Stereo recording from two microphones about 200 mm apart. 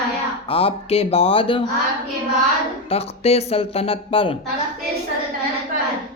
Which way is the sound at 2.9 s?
30° left (ahead or behind).